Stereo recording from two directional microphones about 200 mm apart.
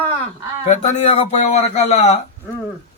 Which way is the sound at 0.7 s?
35° left (ahead or behind).